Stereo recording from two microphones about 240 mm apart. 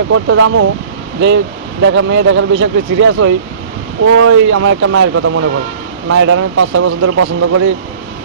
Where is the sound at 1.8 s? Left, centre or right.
Right.